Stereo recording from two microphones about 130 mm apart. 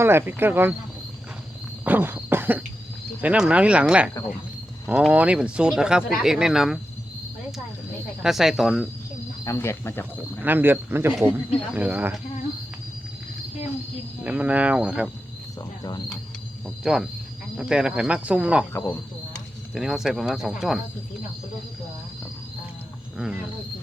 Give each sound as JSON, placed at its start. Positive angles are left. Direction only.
{"t": 0.0, "sound": "speech", "side_deg": -20}
{"t": 1.8, "sound": "a sound", "side_deg": -15}
{"t": 3.2, "sound": "speech", "side_deg": -10}
{"t": 8.2, "sound": "speech", "side_deg": -5}
{"t": 9.4, "sound": "speech", "side_deg": 20}
{"t": 10.4, "sound": "speech", "side_deg": -15}
{"t": 14.3, "sound": "speech", "side_deg": -10}
{"t": 15.8, "sound": "cricket", "side_deg": 30}
{"t": 16.6, "sound": "speech", "side_deg": -5}
{"t": 19.7, "sound": "speech", "side_deg": -5}
{"t": 23.1, "sound": "cricket", "side_deg": -5}